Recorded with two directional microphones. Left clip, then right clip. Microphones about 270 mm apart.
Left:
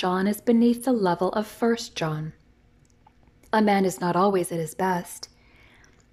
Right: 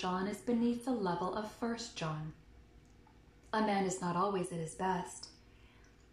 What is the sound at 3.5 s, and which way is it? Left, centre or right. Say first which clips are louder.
A woman's voice: left 12 dB; left.